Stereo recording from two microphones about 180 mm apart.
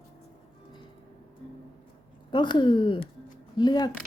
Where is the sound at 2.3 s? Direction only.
25° left (ahead or behind).